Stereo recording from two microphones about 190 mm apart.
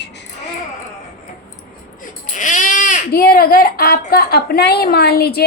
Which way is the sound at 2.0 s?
40° left (ahead or behind).